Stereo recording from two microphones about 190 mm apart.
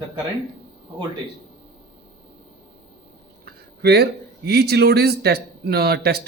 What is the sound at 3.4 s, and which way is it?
A man's voice, 60° right (ahead or behind).